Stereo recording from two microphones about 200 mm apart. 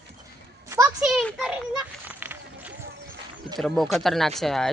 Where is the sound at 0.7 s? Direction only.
15° right (ahead or behind).